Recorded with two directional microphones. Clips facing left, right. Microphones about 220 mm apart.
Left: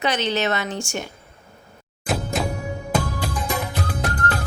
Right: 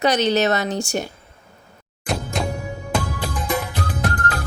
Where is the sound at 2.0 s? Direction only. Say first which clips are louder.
Even; centre (ahead or behind).